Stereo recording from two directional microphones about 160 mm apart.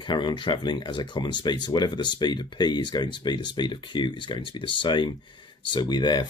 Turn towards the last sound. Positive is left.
turn(degrees=25)  # may be behind; listen again after turning